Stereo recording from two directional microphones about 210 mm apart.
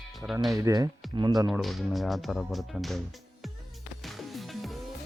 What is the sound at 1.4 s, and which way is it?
Speech, centre (ahead or behind).